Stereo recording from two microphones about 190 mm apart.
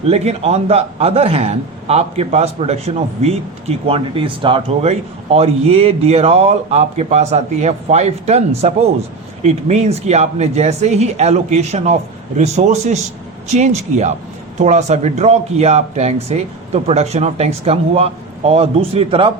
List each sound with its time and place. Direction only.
0.1 s a man's voice: 35° right (ahead or behind)